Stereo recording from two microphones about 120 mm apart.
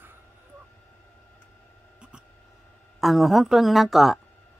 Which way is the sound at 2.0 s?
10° right (ahead or behind).